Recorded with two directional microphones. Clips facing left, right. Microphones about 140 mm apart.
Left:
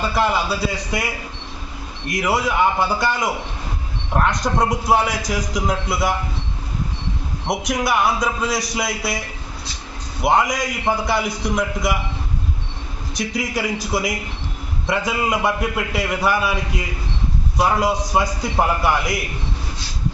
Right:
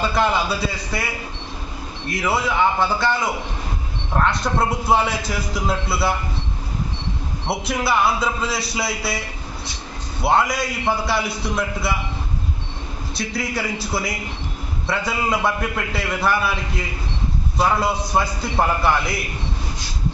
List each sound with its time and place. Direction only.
0.1 s a man's voice: 5° left (ahead or behind)
2.0 s a man's voice: 15° left (ahead or behind)
7.4 s a man's voice: 15° left (ahead or behind)
10.2 s a man's voice: 15° left (ahead or behind)
13.1 s a man's voice: 15° left (ahead or behind)